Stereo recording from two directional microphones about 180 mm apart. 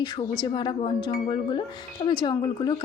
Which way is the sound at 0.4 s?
25° left (ahead or behind).